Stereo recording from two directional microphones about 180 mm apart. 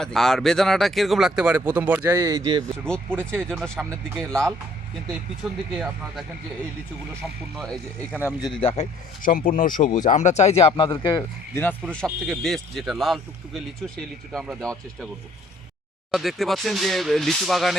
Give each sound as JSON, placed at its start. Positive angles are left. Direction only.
{"t": 0.0, "sound": "speech", "side_deg": 0}
{"t": 2.7, "sound": "speech", "side_deg": 5}
{"t": 7.5, "sound": "speech", "side_deg": 5}
{"t": 8.4, "sound": "speech", "side_deg": 35}
{"t": 9.2, "sound": "speech", "side_deg": 50}
{"t": 16.1, "sound": "speech", "side_deg": 0}